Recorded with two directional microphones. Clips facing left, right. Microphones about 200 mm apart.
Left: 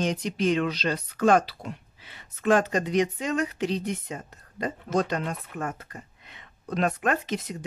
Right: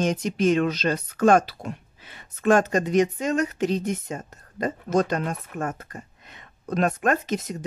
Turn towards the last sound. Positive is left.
turn(degrees=-45)  # may be behind; listen again after turning